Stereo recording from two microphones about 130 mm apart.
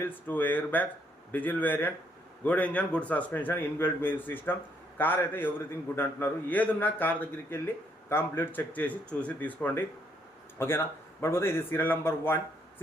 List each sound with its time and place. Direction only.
0.0 s a man's voice: 15° left (ahead or behind)